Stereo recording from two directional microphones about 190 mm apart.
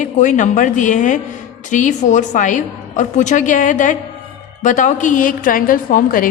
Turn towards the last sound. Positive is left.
turn(degrees=45)  # may be behind; listen again after turning